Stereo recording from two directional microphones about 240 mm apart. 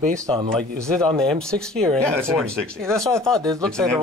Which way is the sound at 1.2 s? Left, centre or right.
Centre.